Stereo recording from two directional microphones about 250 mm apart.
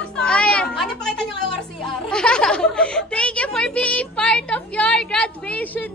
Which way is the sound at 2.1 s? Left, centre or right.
Centre.